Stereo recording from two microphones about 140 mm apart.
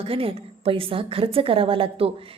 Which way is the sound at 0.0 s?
40° right (ahead or behind).